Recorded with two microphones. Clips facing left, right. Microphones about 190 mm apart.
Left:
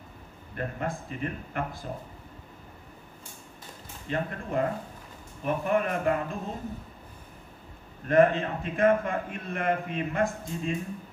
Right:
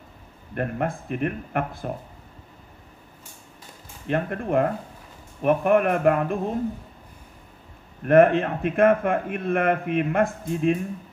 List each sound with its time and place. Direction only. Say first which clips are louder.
0.6 s a man's voice: right 6 dB; 60° right (ahead or behind)
4.1 s a man's voice: right 7 dB; 60° right (ahead or behind)
8.1 s a man's voice: right 5 dB; 60° right (ahead or behind)